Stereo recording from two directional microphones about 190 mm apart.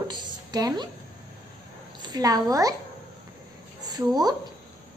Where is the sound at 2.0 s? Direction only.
20° right (ahead or behind).